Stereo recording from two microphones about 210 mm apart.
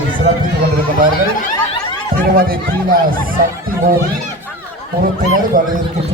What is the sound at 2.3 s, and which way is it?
A man's voice, 45° right (ahead or behind).